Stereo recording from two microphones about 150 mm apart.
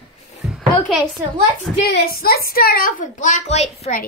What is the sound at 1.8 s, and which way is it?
A woman's voice, 90° left.